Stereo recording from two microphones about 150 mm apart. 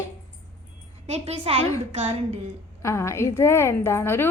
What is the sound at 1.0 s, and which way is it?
Speech, 50° right (ahead or behind).